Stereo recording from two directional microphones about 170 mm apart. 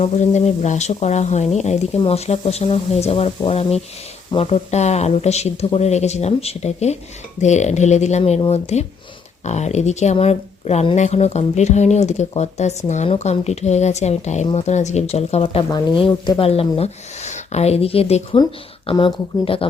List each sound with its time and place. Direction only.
0.0 s speech: 40° left (ahead or behind)
15.7 s speech: 25° left (ahead or behind)